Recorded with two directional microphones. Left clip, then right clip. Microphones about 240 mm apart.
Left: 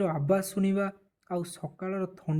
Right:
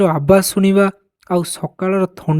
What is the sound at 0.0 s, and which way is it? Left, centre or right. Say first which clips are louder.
Speech: right 15 dB; right.